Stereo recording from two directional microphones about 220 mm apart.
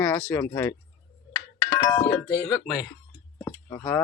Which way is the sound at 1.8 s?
20° left (ahead or behind).